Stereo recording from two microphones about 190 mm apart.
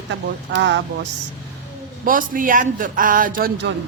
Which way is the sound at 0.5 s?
70° right (ahead or behind).